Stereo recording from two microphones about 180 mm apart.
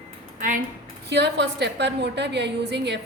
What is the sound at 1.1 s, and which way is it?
A woman's voice, 75° right (ahead or behind).